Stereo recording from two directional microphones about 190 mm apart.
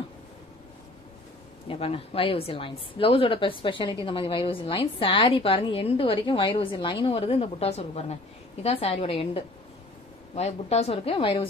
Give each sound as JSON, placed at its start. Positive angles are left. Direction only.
{"t": 1.7, "sound": "a woman's voice", "side_deg": 30}